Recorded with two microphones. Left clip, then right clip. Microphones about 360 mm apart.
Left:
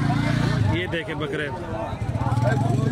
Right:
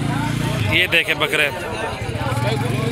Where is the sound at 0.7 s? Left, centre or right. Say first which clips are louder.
Right 11 dB; right.